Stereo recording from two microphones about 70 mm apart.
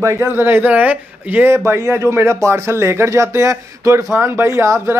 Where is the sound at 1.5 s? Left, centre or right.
Right.